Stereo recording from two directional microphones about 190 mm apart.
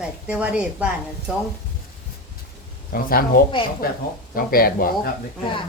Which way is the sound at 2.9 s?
50° left (ahead or behind).